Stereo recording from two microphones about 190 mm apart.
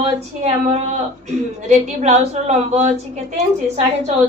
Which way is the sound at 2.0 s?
35° right (ahead or behind).